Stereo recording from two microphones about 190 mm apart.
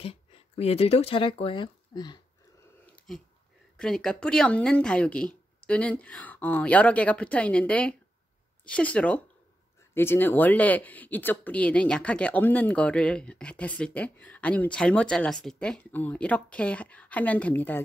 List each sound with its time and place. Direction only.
0.0 s speech: 30° left (ahead or behind)
2.9 s a sound: 5° left (ahead or behind)
3.7 s speech: 5° left (ahead or behind)